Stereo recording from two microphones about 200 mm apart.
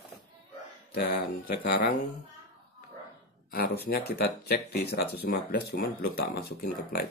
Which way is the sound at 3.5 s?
50° left (ahead or behind).